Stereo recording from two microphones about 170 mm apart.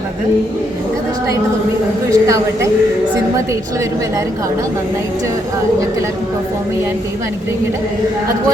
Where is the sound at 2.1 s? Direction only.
20° right (ahead or behind).